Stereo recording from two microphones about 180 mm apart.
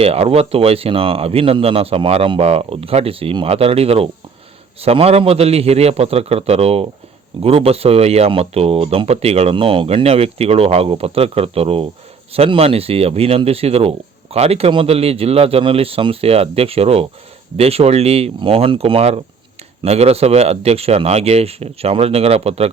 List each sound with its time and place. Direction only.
0.0 s speech: 35° right (ahead or behind)